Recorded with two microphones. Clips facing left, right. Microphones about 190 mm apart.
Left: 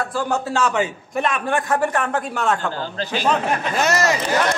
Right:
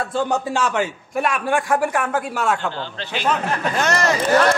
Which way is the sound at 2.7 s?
40° left (ahead or behind).